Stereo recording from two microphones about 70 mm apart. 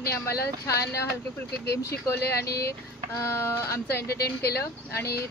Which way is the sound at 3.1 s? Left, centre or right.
Left.